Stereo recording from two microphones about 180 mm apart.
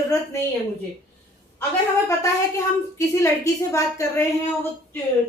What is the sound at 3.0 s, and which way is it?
A woman's voice, 15° left (ahead or behind).